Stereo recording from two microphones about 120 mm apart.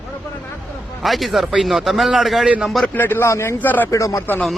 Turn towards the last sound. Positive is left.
turn(degrees=25)  # may be behind; listen again after turning